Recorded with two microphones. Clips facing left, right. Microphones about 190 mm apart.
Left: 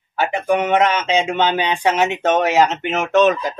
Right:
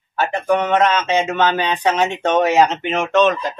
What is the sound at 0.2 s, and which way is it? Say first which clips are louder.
A man's voice: even; 15° left (ahead or behind).